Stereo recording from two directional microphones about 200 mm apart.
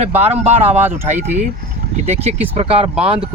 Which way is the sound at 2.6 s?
30° right (ahead or behind).